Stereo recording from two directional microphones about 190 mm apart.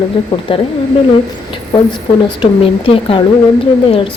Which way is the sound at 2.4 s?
30° left (ahead or behind).